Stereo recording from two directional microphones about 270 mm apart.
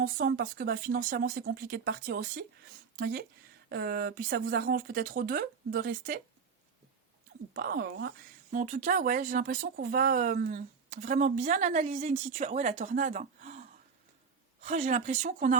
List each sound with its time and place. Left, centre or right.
0.0 s speech: right
7.5 s a woman's voice: right